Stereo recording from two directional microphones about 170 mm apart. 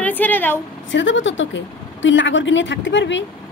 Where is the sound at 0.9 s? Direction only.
90° left.